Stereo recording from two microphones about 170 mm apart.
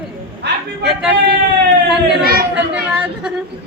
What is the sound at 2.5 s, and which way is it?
Speech, 5° right (ahead or behind).